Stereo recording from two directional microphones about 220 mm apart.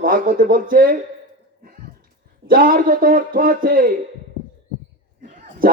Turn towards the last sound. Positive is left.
turn(degrees=-35)  # may be behind; listen again after turning